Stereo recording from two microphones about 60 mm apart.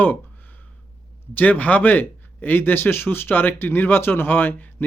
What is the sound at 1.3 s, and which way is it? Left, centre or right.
Speech, left.